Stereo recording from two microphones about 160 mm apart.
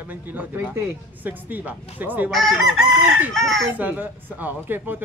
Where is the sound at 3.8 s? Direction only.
10° right (ahead or behind).